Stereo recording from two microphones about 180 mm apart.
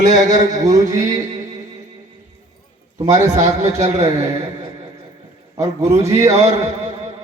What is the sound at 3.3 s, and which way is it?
Speech, 40° right (ahead or behind).